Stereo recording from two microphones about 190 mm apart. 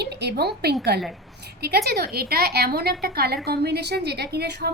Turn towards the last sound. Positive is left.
turn(degrees=-60)  # may be behind; listen again after turning